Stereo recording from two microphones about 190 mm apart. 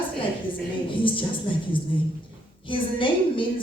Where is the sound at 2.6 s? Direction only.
25° left (ahead or behind).